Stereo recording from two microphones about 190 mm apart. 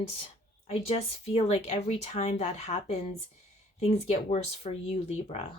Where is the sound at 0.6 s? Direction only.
30° left (ahead or behind).